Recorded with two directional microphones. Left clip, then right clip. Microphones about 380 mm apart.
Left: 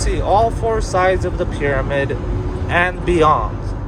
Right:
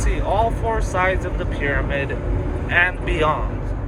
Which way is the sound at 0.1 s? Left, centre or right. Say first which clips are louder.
Left 6 dB; centre.